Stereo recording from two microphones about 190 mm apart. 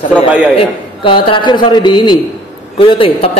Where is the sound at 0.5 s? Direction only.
25° left (ahead or behind).